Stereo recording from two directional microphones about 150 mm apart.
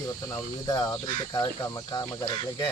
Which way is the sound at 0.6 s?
25° left (ahead or behind).